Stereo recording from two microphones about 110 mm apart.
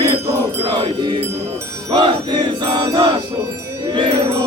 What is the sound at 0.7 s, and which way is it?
Music, 40° right (ahead or behind).